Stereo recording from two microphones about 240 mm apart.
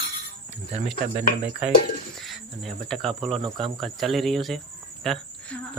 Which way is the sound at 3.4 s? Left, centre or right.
Centre.